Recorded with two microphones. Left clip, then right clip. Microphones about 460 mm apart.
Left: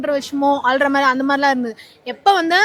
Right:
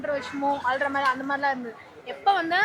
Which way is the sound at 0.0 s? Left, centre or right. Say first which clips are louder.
Left 9 dB; left.